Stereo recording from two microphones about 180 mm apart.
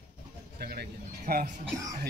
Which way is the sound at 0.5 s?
60° right (ahead or behind).